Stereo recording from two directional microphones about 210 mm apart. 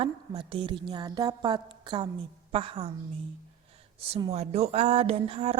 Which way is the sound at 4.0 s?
25° right (ahead or behind).